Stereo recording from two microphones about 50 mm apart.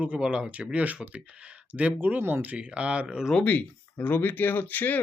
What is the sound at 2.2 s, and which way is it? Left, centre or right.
Speech, right.